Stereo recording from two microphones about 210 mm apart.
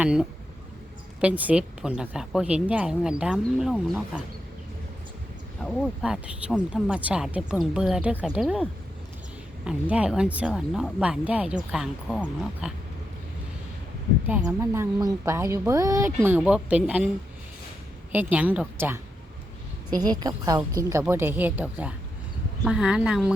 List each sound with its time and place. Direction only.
0.0 s speech: 5° right (ahead or behind)
5.6 s speech: centre (ahead or behind)
9.6 s speech: 5° right (ahead or behind)
14.3 s a woman's voice: 10° right (ahead or behind)
18.1 s a woman's voice: 10° right (ahead or behind)
19.9 s a woman's voice: 20° right (ahead or behind)